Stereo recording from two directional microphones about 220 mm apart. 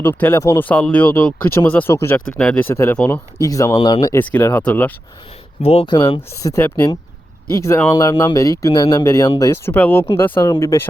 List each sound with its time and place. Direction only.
0.0 s speech: 10° left (ahead or behind)
5.6 s speech: 25° left (ahead or behind)